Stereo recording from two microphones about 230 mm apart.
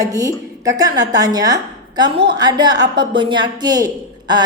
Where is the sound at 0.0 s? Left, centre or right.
Centre.